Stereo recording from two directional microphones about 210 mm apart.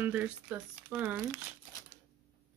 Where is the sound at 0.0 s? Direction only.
5° right (ahead or behind).